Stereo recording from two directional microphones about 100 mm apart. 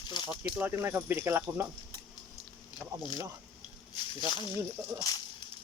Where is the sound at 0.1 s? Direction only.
50° left (ahead or behind).